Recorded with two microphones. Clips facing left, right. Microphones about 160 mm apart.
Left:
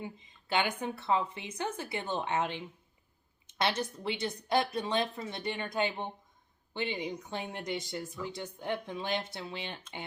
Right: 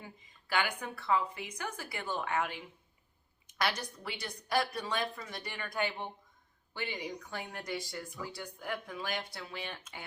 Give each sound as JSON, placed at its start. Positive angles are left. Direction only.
{"t": 0.0, "sound": "speech", "side_deg": 20}